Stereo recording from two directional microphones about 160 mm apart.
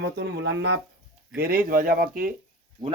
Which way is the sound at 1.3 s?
70° right (ahead or behind).